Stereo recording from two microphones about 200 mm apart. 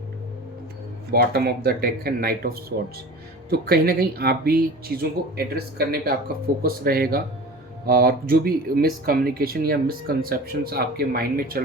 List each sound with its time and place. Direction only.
1.1 s speech: 50° right (ahead or behind)